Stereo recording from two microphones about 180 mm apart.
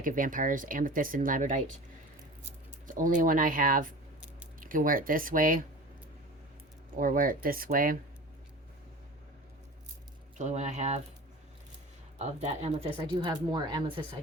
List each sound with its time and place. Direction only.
0.0 s speech: 50° right (ahead or behind)
2.8 s speech: 45° right (ahead or behind)
6.9 s speech: 50° right (ahead or behind)
10.3 s speech: 40° right (ahead or behind)
12.2 s speech: 35° right (ahead or behind)
12.9 s speech: 20° right (ahead or behind)